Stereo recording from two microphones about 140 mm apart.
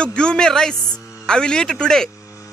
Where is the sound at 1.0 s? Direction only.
20° left (ahead or behind).